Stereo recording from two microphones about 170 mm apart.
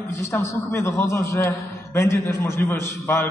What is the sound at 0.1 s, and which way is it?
A man's voice, 15° left (ahead or behind).